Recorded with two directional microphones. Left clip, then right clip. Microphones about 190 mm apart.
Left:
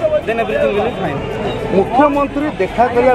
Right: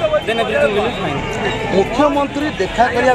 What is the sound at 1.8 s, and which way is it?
Speech, 20° left (ahead or behind).